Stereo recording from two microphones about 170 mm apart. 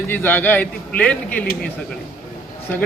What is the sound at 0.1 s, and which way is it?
Speech, 10° left (ahead or behind).